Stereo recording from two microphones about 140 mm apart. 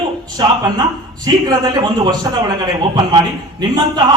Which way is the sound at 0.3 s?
25° right (ahead or behind).